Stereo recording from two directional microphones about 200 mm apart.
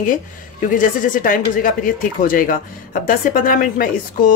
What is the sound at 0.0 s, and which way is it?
A woman's voice, 40° left (ahead or behind).